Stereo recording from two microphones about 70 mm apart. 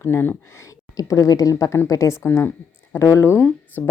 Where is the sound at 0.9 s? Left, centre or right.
Left.